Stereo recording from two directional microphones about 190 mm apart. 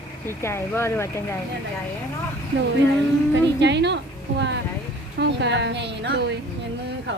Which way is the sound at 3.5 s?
65° right (ahead or behind).